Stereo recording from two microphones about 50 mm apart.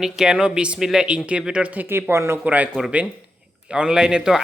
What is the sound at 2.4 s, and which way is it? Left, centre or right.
Speech, right.